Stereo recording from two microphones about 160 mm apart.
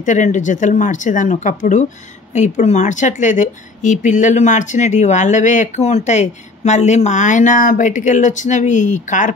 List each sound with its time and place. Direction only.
0.0 s speech: 50° left (ahead or behind)